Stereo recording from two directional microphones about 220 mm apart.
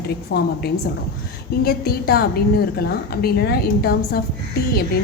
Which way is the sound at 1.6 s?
45° left (ahead or behind).